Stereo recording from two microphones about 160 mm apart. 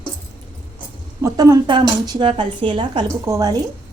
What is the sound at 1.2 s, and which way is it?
A woman's voice, 20° right (ahead or behind).